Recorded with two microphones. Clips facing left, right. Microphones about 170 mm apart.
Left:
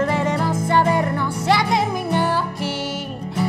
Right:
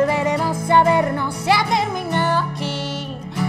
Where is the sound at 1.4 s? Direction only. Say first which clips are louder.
Even; centre (ahead or behind).